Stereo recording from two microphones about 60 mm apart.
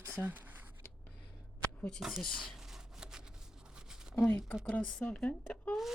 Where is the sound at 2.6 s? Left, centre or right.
Centre.